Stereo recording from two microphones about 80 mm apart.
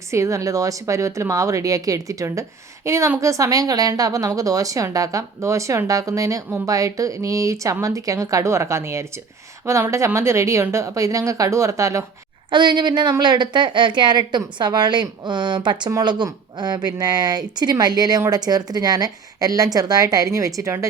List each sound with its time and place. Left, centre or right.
0.1 s a woman's voice: right
12.5 s a woman's voice: right
16.0 s speech: right